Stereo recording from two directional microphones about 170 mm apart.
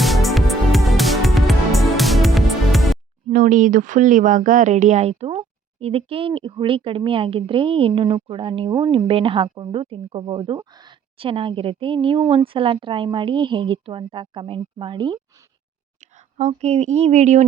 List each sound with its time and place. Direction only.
0.0 s music: centre (ahead or behind)
3.2 s speech: 50° right (ahead or behind); by 15.4 s 25° right (ahead or behind)
16.0 s speech: 45° right (ahead or behind)